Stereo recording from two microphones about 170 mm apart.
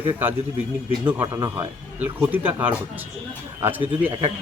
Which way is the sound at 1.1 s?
10° right (ahead or behind).